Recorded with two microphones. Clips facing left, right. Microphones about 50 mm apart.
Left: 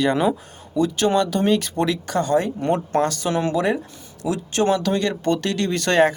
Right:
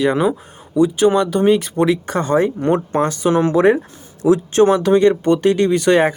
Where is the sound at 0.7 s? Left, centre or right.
Right.